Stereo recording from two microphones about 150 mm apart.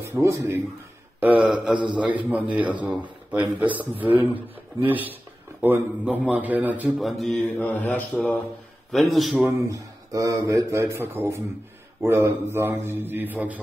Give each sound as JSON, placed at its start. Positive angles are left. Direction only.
{"t": 0.0, "sound": "a man's voice", "side_deg": -20}
{"t": 1.7, "sound": "a man's voice", "side_deg": -30}
{"t": 2.3, "sound": "a man's voice", "side_deg": -10}
{"t": 7.0, "sound": "mantra", "side_deg": 0}
{"t": 7.5, "sound": "speech", "side_deg": 15}
{"t": 8.9, "sound": "mantra", "side_deg": 0}
{"t": 9.5, "sound": "a man's voice", "side_deg": -20}